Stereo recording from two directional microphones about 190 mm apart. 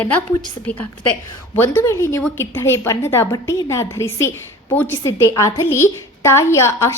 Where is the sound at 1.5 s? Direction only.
10° left (ahead or behind).